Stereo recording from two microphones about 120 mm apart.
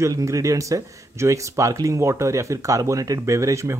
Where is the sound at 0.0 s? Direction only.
25° right (ahead or behind).